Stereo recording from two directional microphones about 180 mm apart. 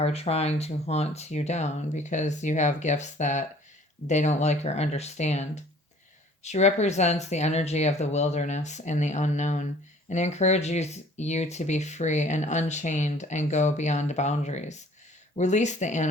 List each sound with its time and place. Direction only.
0.0 s speech: 35° left (ahead or behind)